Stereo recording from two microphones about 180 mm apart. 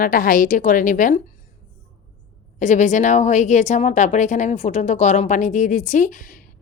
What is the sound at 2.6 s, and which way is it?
Speech, 40° left (ahead or behind).